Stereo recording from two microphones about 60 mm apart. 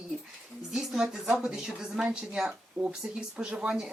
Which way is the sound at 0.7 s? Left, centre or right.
Centre.